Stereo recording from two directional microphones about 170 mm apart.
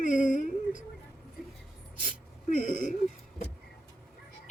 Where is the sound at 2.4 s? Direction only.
50° left (ahead or behind).